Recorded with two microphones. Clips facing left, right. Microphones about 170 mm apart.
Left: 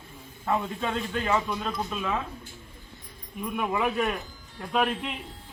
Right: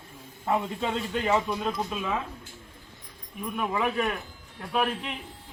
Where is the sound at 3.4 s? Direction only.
5° left (ahead or behind).